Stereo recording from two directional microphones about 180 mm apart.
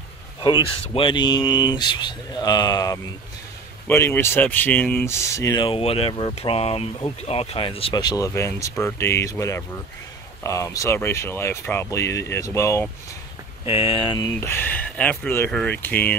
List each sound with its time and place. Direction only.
0.9 s speech: 25° left (ahead or behind)
13.7 s speech: 30° left (ahead or behind); by 16.2 s 10° left (ahead or behind)